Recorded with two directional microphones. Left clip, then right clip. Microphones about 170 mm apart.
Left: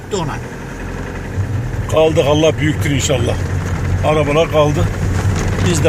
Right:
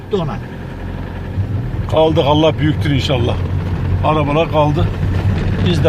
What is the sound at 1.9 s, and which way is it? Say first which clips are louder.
Speech: even; 5° right (ahead or behind).